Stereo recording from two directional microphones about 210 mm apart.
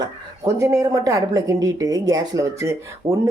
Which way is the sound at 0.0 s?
15° right (ahead or behind).